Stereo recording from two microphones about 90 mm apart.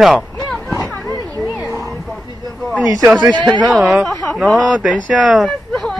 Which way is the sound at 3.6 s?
Centre (ahead or behind).